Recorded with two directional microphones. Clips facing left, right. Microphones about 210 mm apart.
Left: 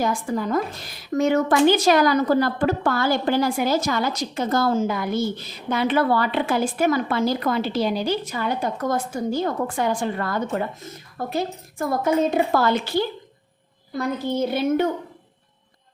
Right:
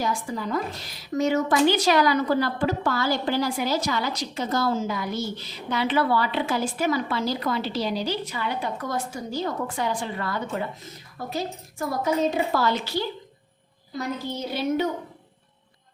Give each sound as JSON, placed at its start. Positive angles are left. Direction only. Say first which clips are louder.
{"t": 0.0, "sound": "a woman's voice", "louder": "left 4 dB", "side_deg": 50}
{"t": 14.3, "sound": "a woman's voice", "louder": "left 5 dB", "side_deg": 50}